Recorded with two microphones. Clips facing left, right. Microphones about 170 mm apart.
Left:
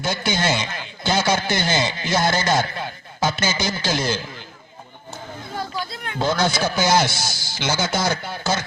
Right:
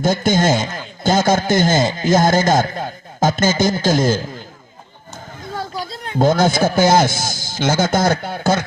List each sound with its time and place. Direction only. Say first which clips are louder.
0.0 s speech: right 7 dB; 45° right (ahead or behind)
5.7 s a sound: right 2 dB; 35° right (ahead or behind)
6.1 s speech: right 7 dB; 50° right (ahead or behind)